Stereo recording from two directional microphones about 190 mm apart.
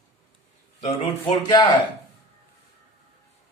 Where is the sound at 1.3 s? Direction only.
20° left (ahead or behind).